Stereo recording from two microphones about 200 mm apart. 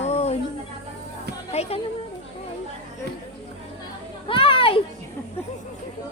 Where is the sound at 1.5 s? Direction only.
30° left (ahead or behind).